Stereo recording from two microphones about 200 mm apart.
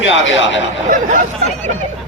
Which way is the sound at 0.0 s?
65° left (ahead or behind).